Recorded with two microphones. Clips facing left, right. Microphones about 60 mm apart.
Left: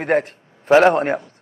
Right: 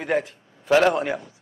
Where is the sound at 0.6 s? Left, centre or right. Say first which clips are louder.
Left 5 dB; left.